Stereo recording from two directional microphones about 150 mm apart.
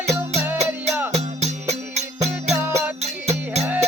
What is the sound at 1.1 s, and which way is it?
Music, 50° right (ahead or behind).